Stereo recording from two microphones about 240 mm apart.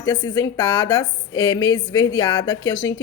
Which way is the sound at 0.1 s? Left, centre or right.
Centre.